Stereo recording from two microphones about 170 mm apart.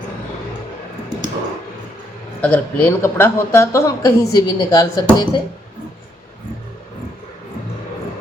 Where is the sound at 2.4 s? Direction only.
10° left (ahead or behind).